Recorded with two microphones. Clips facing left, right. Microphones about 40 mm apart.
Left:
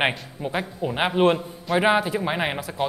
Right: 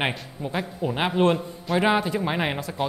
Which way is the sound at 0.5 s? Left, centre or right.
Centre.